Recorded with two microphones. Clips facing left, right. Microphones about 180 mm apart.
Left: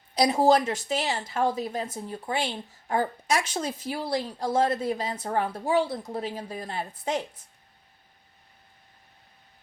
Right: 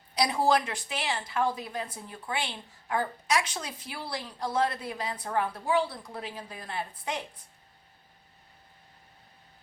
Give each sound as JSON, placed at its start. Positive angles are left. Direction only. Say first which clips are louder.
{"t": 0.1, "sound": "speech", "louder": "left 5 dB", "side_deg": 45}